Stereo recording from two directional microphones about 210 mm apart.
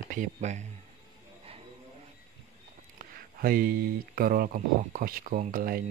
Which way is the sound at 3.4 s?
45° right (ahead or behind).